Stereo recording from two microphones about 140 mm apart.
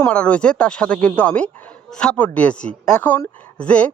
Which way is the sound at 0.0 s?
10° left (ahead or behind).